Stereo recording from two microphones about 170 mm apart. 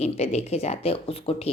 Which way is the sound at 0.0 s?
40° left (ahead or behind).